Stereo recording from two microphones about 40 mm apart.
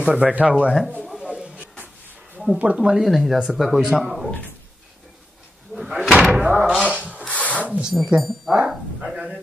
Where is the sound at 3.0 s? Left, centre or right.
Centre.